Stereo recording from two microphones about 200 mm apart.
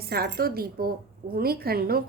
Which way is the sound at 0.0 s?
50° right (ahead or behind).